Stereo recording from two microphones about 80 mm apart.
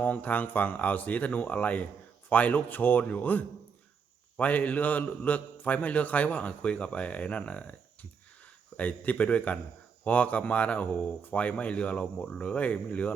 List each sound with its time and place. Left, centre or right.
0.0 s speech: left